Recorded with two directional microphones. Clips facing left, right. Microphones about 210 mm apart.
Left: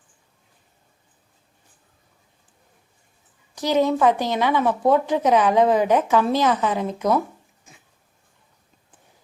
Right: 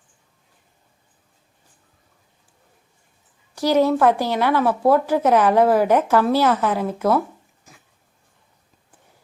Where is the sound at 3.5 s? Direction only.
10° right (ahead or behind).